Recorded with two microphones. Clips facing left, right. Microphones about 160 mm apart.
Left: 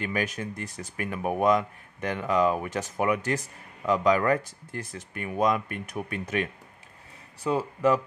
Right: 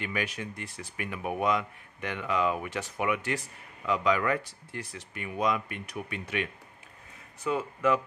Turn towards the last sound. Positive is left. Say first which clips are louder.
# left 3 dB
turn(degrees=35)  # may be behind; listen again after turning